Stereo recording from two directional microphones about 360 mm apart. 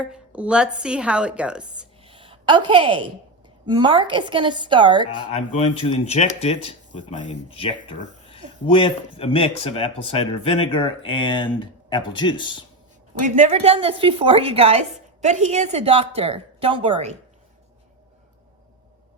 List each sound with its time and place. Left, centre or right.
0.0 s a woman's voice: centre
2.0 s a sound: centre
3.7 s a woman's voice: centre
5.1 s speech: centre
13.2 s a woman's voice: centre